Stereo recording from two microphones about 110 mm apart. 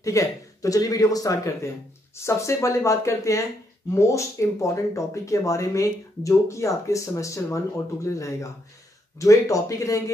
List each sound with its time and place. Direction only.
0.0 s speech: 30° left (ahead or behind)